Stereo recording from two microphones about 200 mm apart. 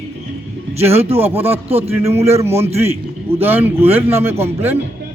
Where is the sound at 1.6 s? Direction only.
30° right (ahead or behind).